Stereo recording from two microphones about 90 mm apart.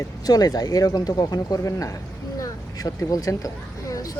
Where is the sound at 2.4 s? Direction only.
40° left (ahead or behind).